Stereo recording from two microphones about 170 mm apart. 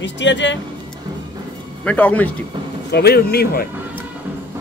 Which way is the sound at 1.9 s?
10° left (ahead or behind).